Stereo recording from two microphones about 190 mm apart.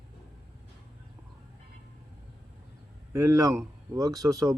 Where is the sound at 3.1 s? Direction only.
15° right (ahead or behind).